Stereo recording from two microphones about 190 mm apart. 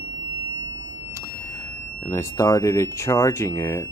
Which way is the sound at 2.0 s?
15° left (ahead or behind).